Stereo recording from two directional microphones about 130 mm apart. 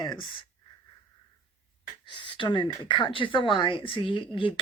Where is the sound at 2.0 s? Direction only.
40° left (ahead or behind).